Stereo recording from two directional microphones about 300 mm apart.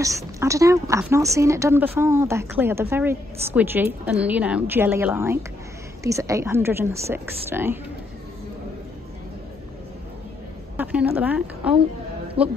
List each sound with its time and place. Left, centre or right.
0.0 s a woman's voice: centre
10.8 s speech: centre
12.4 s speech: centre